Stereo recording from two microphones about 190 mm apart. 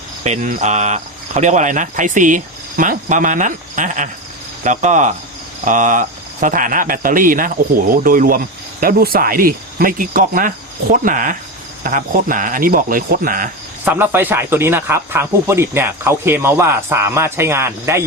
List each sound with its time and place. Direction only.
0.3 s speech: 40° right (ahead or behind)
13.8 s speech: 10° right (ahead or behind)